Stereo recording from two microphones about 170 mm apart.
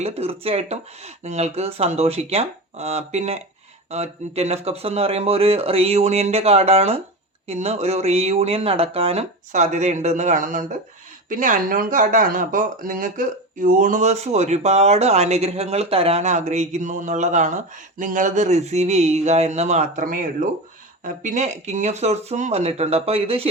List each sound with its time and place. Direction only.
0.0 s speech: 35° right (ahead or behind)